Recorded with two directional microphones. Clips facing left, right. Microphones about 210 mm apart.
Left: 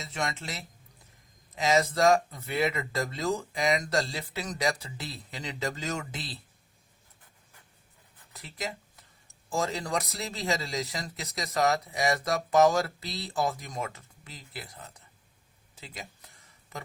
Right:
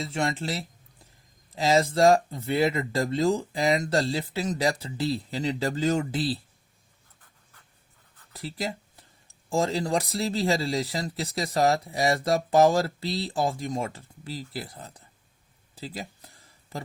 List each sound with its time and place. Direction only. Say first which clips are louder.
0.0 s speech: right 6 dB; 30° right (ahead or behind)
8.3 s speech: right 5 dB; 30° right (ahead or behind)
15.7 s a sound: right 8 dB; 35° right (ahead or behind)